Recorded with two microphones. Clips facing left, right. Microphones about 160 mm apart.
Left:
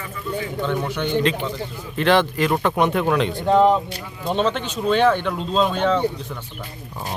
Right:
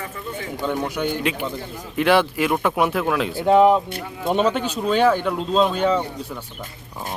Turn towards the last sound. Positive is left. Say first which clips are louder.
# right 1 dB
turn(degrees=-5)  # may be behind; listen again after turning